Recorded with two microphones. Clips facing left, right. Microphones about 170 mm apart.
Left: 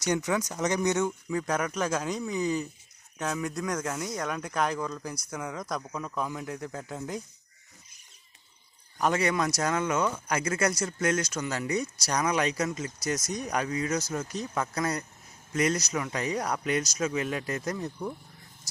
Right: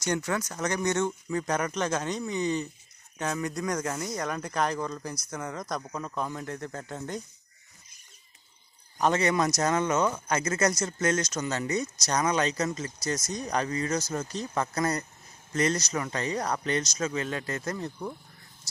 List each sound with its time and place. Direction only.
0.0 s speech: 15° left (ahead or behind)
5.9 s speech: 10° right (ahead or behind)
6.1 s speech: 5° left (ahead or behind)
9.0 s speech: 10° left (ahead or behind)